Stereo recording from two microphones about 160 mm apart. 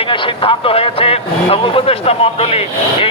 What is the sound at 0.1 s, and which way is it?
Speech, 35° left (ahead or behind).